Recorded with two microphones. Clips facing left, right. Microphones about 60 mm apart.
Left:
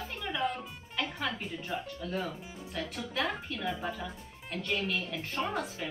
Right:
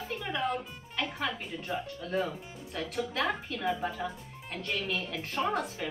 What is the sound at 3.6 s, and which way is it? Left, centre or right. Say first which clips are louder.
Speech: right 4 dB; centre.